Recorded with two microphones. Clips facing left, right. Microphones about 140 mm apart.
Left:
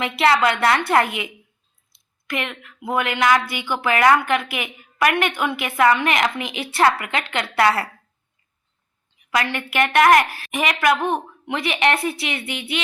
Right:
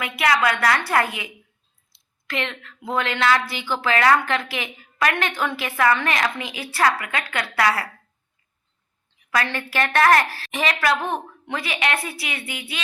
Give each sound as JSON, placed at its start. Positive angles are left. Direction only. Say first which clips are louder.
{"t": 0.0, "sound": "a woman's voice", "louder": "left 3 dB", "side_deg": 25}
{"t": 2.3, "sound": "a woman's voice", "louder": "left 1 dB", "side_deg": 15}
{"t": 9.3, "sound": "a woman's voice", "louder": "left 2 dB", "side_deg": 20}